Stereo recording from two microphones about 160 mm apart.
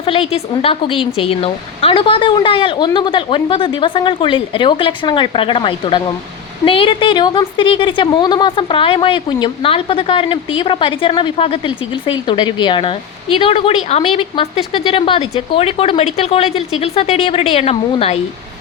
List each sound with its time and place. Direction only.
0.0 s a woman's voice: 35° left (ahead or behind)